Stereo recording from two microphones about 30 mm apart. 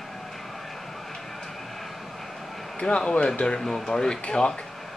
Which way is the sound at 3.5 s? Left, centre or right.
Centre.